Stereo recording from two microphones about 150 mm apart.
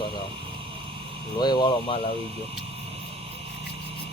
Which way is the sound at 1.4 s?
30° left (ahead or behind).